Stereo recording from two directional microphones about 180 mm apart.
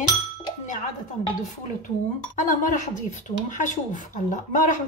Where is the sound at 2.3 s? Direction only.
45° left (ahead or behind).